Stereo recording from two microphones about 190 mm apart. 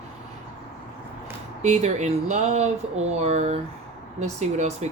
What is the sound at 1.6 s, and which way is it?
Speech, 35° right (ahead or behind).